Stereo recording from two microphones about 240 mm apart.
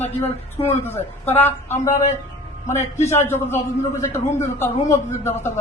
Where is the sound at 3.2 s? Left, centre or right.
Centre.